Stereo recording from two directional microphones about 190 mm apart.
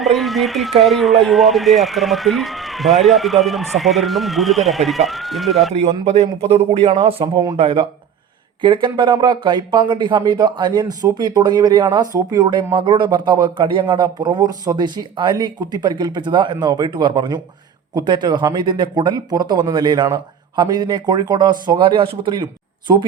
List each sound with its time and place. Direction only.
0.0 s speech: centre (ahead or behind)
5.7 s speech: 35° right (ahead or behind)